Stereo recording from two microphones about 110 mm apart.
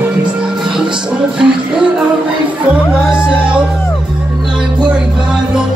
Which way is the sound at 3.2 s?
10° right (ahead or behind).